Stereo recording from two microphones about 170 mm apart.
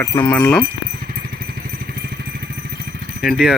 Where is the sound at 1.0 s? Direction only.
65° right (ahead or behind).